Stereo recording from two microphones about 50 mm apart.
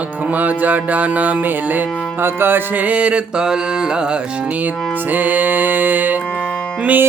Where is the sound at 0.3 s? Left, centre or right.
Right.